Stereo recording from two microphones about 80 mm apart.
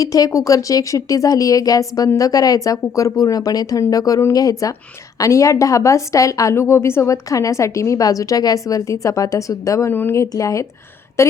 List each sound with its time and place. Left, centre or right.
0.0 s a woman's voice: left
6.5 s a woman's voice: left
9.9 s speech: left
10.2 s a woman's voice: left